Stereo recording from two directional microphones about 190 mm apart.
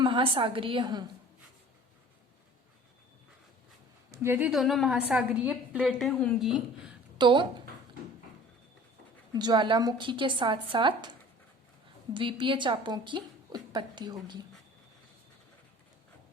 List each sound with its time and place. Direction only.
0.0 s a woman's voice: 25° right (ahead or behind)
4.1 s a woman's voice: 15° right (ahead or behind)
7.2 s a woman's voice: 25° right (ahead or behind)
9.3 s a woman's voice: 20° right (ahead or behind)
12.1 s a woman's voice: 25° right (ahead or behind)